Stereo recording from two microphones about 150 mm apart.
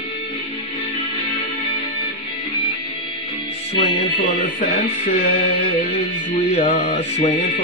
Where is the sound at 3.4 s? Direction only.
40° left (ahead or behind).